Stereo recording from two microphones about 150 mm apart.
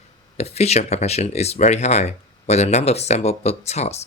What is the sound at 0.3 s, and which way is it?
Speech, 45° left (ahead or behind).